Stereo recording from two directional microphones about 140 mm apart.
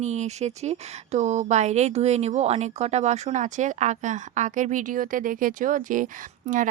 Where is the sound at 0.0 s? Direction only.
55° right (ahead or behind).